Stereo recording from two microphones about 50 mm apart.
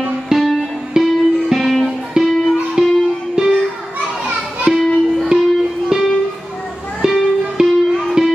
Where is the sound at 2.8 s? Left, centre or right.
Centre.